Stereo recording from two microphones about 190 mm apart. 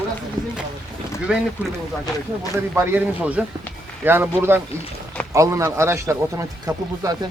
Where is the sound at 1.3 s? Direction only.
5° right (ahead or behind).